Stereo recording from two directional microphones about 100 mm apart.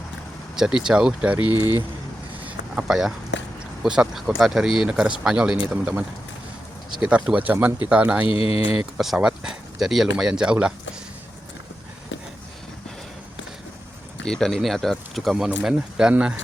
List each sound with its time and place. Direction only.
0.5 s speech: 5° right (ahead or behind)
1.5 s speech: 45° left (ahead or behind)
2.5 s a sound: 5° right (ahead or behind)
3.8 s speech: 5° right (ahead or behind)
8.3 s speech: 75° left (ahead or behind)
9.0 s speech: 5° right (ahead or behind)
14.3 s speech: 5° left (ahead or behind)